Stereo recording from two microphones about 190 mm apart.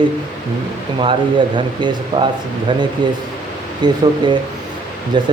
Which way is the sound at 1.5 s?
25° right (ahead or behind).